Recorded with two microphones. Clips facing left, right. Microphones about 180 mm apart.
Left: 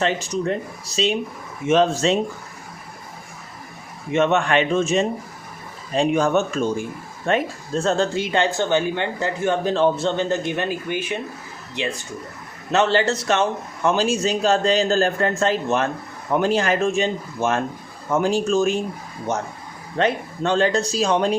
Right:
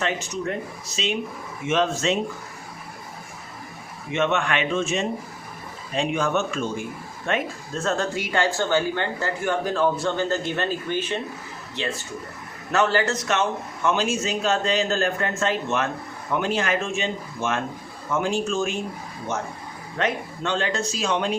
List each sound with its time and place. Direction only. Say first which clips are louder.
0.0 s a man's voice: left 5 dB; 35° left (ahead or behind)
4.1 s a man's voice: left 5 dB; 40° left (ahead or behind); by 11.9 s 15° left (ahead or behind)
12.7 s a man's voice: left 3 dB; 25° left (ahead or behind)
20.0 s a man's voice: left 5 dB; 35° left (ahead or behind)